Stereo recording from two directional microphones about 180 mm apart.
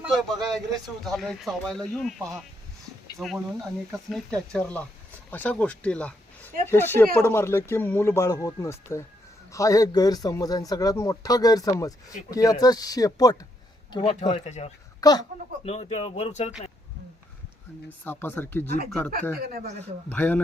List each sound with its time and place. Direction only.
1.0 s a man's voice: centre (ahead or behind); by 13.3 s 20° left (ahead or behind)
13.9 s speech: 30° left (ahead or behind)
15.0 s a man's voice: 20° left (ahead or behind)
15.6 s speech: 35° left (ahead or behind)
18.0 s speech: 10° left (ahead or behind)
19.4 s speech: 55° right (ahead or behind)
20.1 s speech: 10° left (ahead or behind)